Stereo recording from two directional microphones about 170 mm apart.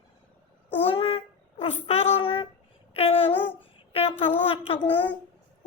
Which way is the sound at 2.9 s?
35° left (ahead or behind).